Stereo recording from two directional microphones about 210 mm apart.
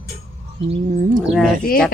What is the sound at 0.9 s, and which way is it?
Speech, 40° right (ahead or behind).